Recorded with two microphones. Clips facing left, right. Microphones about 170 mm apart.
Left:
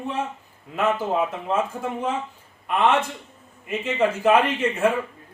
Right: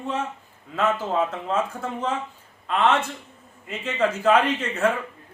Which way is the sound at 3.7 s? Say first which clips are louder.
Left 2 dB; 15° left (ahead or behind).